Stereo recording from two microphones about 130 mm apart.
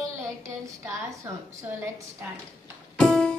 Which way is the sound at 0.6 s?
25° right (ahead or behind).